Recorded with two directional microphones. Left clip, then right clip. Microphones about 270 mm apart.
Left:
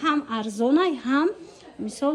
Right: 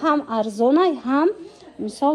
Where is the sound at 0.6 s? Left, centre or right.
Centre.